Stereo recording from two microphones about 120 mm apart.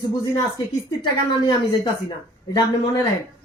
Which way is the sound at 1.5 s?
35° left (ahead or behind).